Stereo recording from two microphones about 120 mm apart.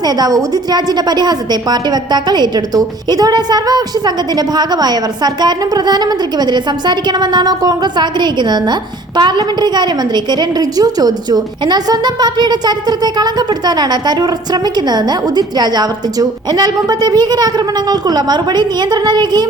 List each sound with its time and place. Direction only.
0.0 s a woman's voice: 35° right (ahead or behind)